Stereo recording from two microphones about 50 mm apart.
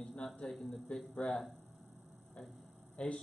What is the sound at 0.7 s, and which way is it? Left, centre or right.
Speech, centre.